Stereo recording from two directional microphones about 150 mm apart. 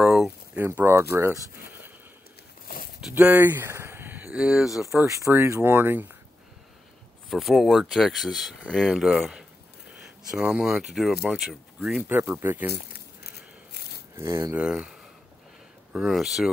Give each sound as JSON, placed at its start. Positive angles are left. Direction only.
{"t": 0.0, "sound": "a sound", "side_deg": 0}
{"t": 0.6, "sound": "a sound", "side_deg": -15}
{"t": 1.1, "sound": "speech", "side_deg": -20}
{"t": 3.0, "sound": "speech", "side_deg": -10}
{"t": 5.1, "sound": "speech", "side_deg": -20}
{"t": 7.2, "sound": "speech", "side_deg": 0}
{"t": 12.0, "sound": "speech", "side_deg": -15}
{"t": 12.7, "sound": "crumpling", "side_deg": 90}
{"t": 14.1, "sound": "speech", "side_deg": -15}